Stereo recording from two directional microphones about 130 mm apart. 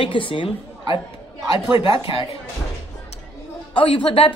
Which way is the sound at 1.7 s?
45° left (ahead or behind).